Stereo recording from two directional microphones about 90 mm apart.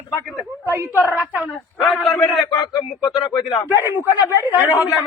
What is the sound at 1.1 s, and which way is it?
Speech, 20° right (ahead or behind).